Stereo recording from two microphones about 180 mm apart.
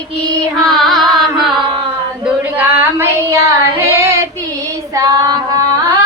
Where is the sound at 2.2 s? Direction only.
10° right (ahead or behind).